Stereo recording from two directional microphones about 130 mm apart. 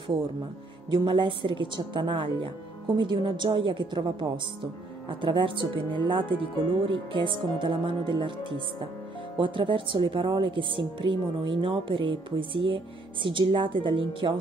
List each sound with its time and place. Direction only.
0.8 s speech: 40° right (ahead or behind)